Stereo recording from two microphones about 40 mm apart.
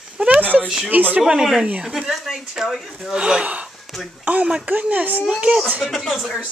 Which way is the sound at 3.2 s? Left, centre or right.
Right.